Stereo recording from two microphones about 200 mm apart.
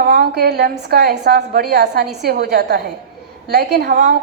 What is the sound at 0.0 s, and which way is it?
A woman's voice, 50° right (ahead or behind).